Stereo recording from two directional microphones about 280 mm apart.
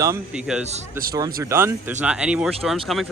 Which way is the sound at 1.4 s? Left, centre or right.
Centre.